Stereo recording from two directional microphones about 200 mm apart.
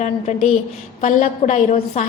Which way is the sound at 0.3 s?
35° left (ahead or behind).